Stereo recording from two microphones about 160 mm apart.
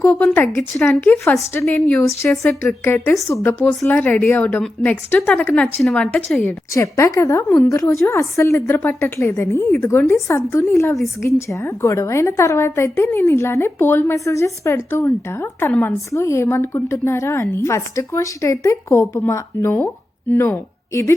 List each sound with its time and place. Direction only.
0.0 s a woman's voice: 10° left (ahead or behind)
2.3 s speech: centre (ahead or behind)
2.6 s a woman's voice: 15° left (ahead or behind)